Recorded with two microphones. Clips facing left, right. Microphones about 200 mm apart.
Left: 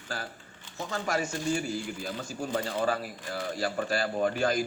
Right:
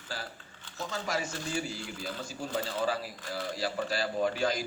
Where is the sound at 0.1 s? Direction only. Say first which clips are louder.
Left 3 dB; 50° left (ahead or behind).